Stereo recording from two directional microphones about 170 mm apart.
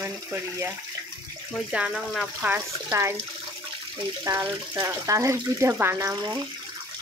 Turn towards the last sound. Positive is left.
turn(degrees=-20)  # may be behind; listen again after turning